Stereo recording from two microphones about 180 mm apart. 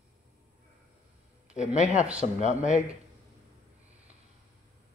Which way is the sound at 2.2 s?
45° left (ahead or behind).